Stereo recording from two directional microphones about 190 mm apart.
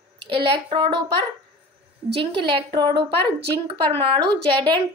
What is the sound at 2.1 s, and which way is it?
Speech, 25° right (ahead or behind).